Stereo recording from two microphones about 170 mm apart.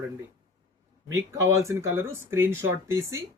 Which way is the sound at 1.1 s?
15° right (ahead or behind).